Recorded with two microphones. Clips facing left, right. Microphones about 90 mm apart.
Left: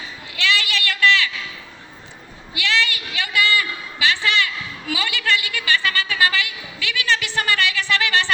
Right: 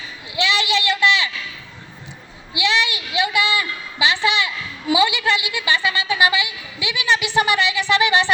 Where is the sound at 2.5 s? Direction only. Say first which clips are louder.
Right 2 dB; 20° right (ahead or behind).